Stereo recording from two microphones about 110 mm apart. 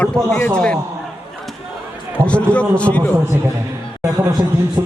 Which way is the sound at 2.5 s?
10° left (ahead or behind).